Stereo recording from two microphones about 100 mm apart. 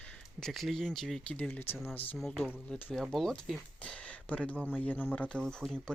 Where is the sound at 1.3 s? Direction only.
15° left (ahead or behind).